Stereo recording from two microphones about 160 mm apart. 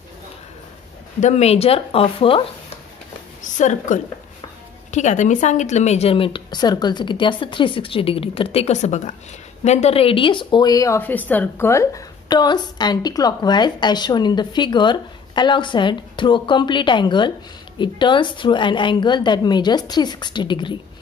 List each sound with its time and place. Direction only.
1.2 s a woman's voice: 40° left (ahead or behind)
3.5 s a woman's voice: 50° left (ahead or behind); by 20.7 s 30° left (ahead or behind)